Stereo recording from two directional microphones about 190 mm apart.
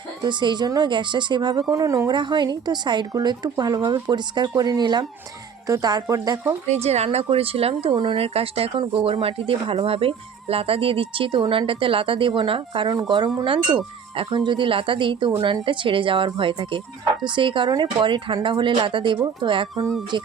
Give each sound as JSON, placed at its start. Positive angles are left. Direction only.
{"t": 0.2, "sound": "speech", "side_deg": -25}
{"t": 6.7, "sound": "speech", "side_deg": -35}